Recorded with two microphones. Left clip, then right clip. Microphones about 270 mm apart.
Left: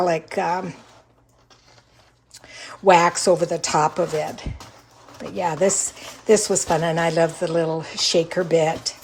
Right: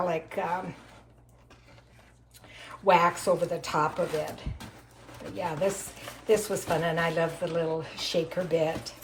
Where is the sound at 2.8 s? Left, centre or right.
Left.